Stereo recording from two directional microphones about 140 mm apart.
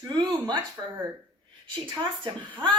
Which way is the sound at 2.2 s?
35° right (ahead or behind).